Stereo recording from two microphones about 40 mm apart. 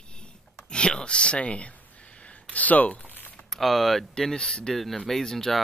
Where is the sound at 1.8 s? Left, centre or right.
Left.